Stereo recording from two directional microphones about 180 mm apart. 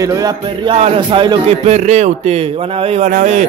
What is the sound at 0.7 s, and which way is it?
A man's voice, 30° right (ahead or behind).